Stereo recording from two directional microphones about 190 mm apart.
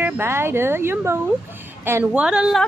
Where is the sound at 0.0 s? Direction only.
10° right (ahead or behind).